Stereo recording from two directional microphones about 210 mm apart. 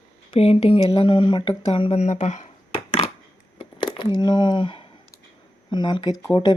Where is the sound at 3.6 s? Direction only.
25° left (ahead or behind).